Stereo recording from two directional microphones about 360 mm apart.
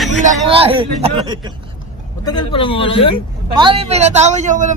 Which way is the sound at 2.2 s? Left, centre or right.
Centre.